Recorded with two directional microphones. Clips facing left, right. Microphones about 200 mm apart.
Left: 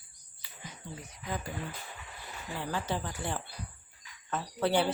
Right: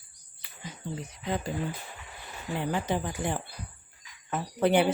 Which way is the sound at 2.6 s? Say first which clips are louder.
Right 5 dB; 20° right (ahead or behind).